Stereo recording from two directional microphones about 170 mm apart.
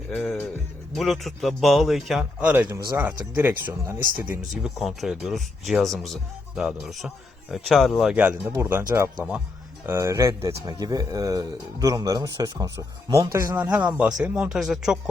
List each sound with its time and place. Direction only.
0.9 s speech: centre (ahead or behind)
2.5 s speech: 10° right (ahead or behind)
4.0 s speech: 55° right (ahead or behind)
4.5 s speech: centre (ahead or behind)